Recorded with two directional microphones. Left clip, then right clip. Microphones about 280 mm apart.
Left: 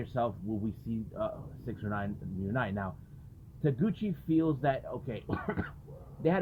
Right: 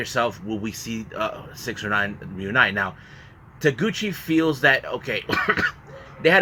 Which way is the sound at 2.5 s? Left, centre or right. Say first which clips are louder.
Right 16 dB; right.